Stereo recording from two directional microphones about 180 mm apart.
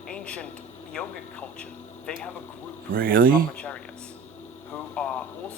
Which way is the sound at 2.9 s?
55° right (ahead or behind).